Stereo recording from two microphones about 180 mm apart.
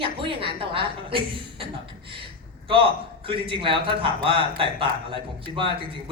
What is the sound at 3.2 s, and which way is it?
A man's voice, 30° right (ahead or behind).